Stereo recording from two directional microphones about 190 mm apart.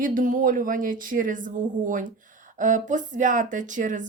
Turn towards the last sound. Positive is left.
turn(degrees=-40)  # may be behind; listen again after turning